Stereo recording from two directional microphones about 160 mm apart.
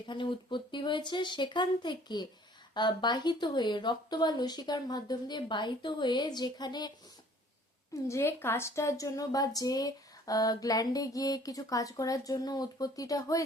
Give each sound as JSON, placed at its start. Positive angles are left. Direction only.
{"t": 0.1, "sound": "speech", "side_deg": 30}
{"t": 8.0, "sound": "a woman's voice", "side_deg": 15}